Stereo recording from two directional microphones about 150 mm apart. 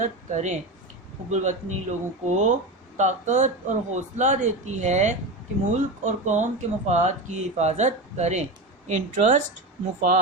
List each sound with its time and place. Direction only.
0.0 s a woman's voice: 50° right (ahead or behind)